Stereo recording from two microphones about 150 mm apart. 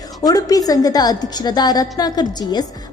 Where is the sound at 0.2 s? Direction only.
25° left (ahead or behind).